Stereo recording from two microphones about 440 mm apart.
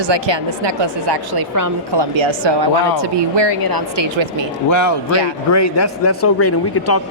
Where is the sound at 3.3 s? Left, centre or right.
Right.